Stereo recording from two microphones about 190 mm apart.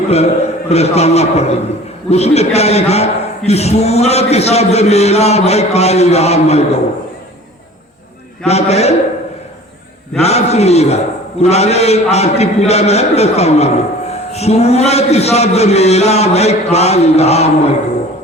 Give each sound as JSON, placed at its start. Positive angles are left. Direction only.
{"t": 0.7, "sound": "a man's voice", "side_deg": 35}
{"t": 8.4, "sound": "a man's voice", "side_deg": 35}
{"t": 10.2, "sound": "a man's voice", "side_deg": 35}